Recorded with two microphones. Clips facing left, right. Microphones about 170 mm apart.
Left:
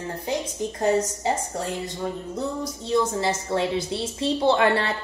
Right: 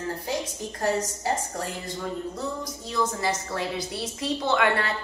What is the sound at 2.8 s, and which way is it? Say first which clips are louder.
A woman's voice: left 4 dB; 25° left (ahead or behind).